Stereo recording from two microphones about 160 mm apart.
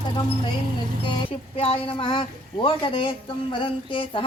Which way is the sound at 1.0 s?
35° left (ahead or behind).